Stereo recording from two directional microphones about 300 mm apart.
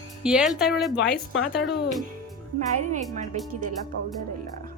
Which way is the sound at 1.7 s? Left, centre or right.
Centre.